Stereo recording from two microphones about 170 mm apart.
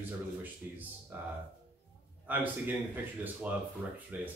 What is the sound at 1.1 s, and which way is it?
Speech, 10° right (ahead or behind).